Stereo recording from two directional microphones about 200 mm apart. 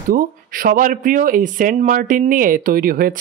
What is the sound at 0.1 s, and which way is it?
Speech, 45° right (ahead or behind).